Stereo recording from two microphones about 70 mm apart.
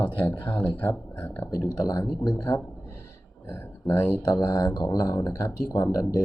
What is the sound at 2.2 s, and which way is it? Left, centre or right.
Speech, left.